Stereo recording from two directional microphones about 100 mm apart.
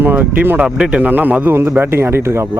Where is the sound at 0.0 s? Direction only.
20° right (ahead or behind).